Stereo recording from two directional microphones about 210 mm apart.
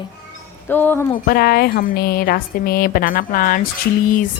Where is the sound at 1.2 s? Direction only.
45° left (ahead or behind).